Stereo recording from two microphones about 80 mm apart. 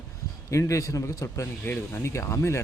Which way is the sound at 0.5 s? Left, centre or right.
Left.